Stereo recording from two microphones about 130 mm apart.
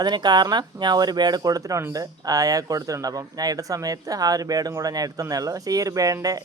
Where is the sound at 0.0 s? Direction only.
35° right (ahead or behind).